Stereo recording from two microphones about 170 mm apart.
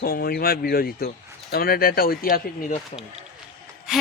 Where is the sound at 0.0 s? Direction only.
65° left (ahead or behind).